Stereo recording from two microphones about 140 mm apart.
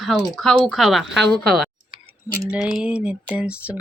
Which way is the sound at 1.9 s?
40° right (ahead or behind).